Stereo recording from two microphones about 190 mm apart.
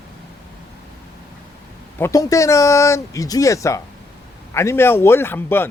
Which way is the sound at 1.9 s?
15° left (ahead or behind).